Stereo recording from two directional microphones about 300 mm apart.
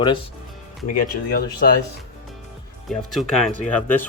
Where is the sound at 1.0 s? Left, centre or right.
Left.